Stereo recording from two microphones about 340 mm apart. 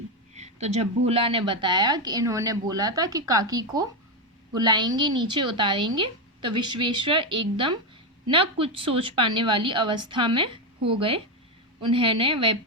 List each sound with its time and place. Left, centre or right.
0.3 s a woman's voice: centre